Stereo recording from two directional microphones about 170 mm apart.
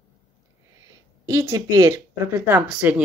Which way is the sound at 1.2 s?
20° right (ahead or behind).